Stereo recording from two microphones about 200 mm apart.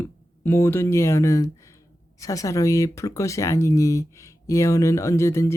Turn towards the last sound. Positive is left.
turn(degrees=15)  # may be behind; listen again after turning